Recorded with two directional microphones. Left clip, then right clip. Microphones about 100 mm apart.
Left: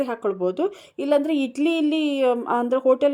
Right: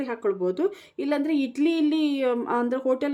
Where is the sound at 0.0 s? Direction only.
20° left (ahead or behind).